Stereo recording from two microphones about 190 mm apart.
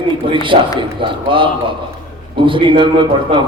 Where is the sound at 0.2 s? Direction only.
25° right (ahead or behind).